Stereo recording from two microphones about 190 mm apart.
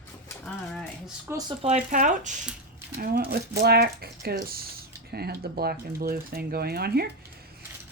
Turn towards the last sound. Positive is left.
turn(degrees=-55)  # may be behind; listen again after turning